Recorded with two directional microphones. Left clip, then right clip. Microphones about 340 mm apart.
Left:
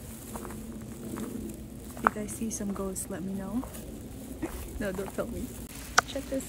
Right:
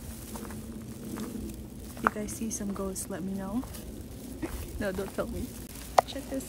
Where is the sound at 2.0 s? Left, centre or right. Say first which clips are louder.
Left 1 dB; centre.